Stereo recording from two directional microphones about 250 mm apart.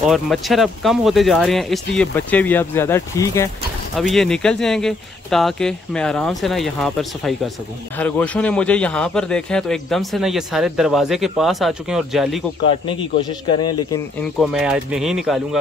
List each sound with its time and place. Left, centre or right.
0.0 s a man's voice: centre
12.6 s speech: centre
14.4 s a man's voice: centre